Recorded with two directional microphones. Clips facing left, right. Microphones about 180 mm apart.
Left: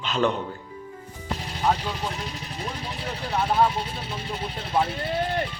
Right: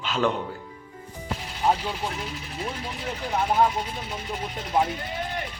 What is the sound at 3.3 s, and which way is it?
Speech, 10° right (ahead or behind).